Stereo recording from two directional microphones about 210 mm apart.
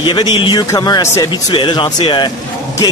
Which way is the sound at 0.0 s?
20° left (ahead or behind).